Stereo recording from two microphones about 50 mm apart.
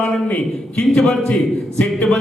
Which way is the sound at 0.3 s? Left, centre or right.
Left.